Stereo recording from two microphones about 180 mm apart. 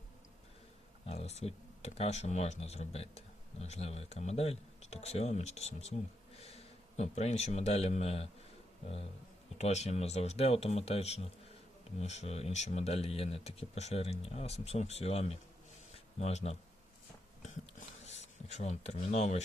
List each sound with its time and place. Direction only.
1.0 s speech: 35° left (ahead or behind)
9.6 s speech: 40° left (ahead or behind)
18.0 s a sound: 40° left (ahead or behind)